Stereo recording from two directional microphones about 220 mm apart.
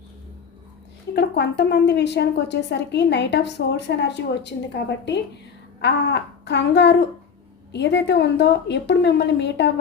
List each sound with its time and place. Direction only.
1.1 s speech: 50° left (ahead or behind)